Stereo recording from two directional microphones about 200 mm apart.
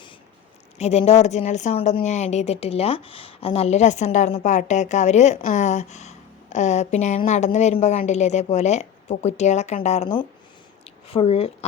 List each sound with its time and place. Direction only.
0.8 s a woman's voice: 30° left (ahead or behind)